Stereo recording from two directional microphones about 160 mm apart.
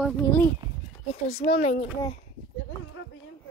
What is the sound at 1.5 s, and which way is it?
Speech, 40° left (ahead or behind).